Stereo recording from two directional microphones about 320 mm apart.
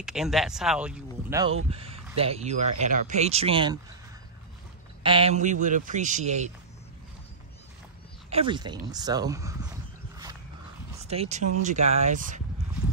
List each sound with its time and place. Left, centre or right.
0.0 s speech: centre
5.0 s speech: centre
8.3 s a sound: centre
11.1 s speech: right